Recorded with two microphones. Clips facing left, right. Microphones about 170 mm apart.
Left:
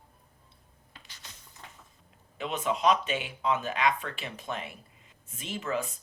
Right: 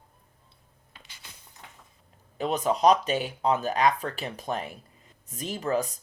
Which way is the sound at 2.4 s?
40° right (ahead or behind).